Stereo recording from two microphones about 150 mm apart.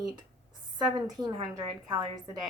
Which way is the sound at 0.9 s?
30° right (ahead or behind).